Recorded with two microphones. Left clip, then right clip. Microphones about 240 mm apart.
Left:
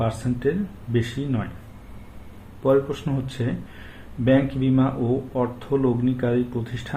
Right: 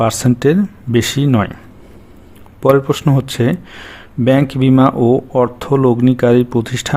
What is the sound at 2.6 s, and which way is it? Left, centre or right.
Speech, right.